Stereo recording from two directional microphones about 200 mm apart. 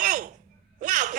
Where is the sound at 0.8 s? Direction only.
40° right (ahead or behind).